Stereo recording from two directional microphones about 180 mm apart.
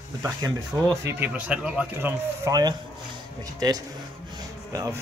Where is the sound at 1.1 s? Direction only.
10° right (ahead or behind).